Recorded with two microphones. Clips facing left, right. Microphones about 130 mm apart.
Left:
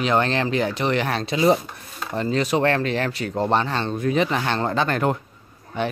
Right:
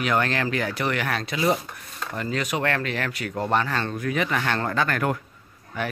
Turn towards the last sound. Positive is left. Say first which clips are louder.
# left 4 dB
turn(degrees=25)  # may be behind; listen again after turning